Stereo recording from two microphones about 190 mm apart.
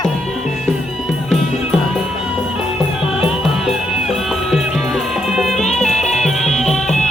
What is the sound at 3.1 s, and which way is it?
Music, 5° right (ahead or behind).